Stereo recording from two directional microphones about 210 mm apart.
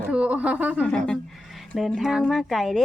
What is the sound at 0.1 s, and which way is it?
Speech, 5° right (ahead or behind).